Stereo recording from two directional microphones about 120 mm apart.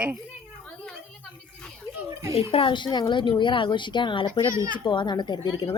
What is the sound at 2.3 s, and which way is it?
Speech, 50° left (ahead or behind).